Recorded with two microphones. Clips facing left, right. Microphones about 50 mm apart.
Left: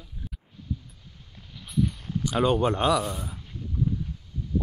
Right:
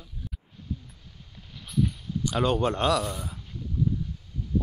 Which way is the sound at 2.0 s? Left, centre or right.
Left.